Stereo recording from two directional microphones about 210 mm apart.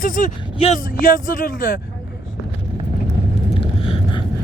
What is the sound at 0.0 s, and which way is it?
Speech, 40° left (ahead or behind).